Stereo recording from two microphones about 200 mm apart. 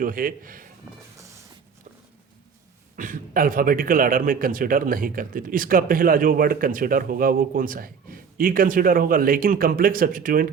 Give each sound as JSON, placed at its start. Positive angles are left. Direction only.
{"t": 0.0, "sound": "a man's voice", "side_deg": -45}
{"t": 2.9, "sound": "a man's voice", "side_deg": -40}